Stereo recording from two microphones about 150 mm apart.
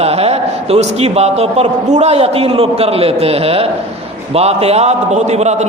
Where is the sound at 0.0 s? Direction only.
45° right (ahead or behind).